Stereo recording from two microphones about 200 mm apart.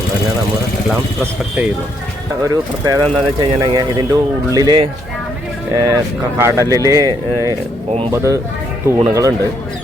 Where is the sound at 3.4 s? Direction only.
20° right (ahead or behind).